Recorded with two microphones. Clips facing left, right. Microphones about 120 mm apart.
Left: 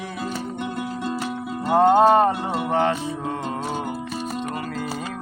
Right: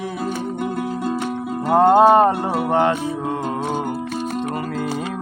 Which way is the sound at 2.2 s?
50° right (ahead or behind).